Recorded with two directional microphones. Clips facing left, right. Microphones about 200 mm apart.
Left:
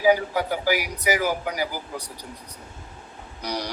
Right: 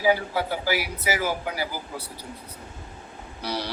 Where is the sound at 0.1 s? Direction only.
15° left (ahead or behind).